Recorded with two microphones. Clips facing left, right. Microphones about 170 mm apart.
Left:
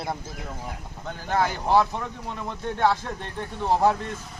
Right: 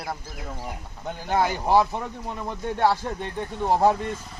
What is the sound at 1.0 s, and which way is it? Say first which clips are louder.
Speech: right 1 dB; 10° right (ahead or behind).